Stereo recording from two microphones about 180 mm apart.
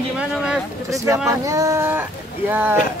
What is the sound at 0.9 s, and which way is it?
Speech, 15° right (ahead or behind).